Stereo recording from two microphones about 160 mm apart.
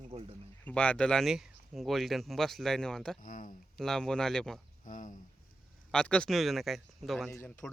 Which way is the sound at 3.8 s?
5° left (ahead or behind).